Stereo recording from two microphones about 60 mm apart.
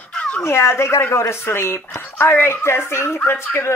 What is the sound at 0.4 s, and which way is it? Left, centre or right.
A woman's voice, left.